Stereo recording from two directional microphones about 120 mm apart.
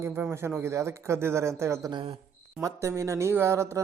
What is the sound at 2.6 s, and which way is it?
Speech, 25° right (ahead or behind).